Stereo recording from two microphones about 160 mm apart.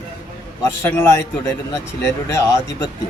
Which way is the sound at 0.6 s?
15° left (ahead or behind).